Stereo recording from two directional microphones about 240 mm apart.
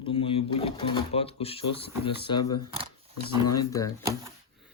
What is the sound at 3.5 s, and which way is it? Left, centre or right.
Speech, centre.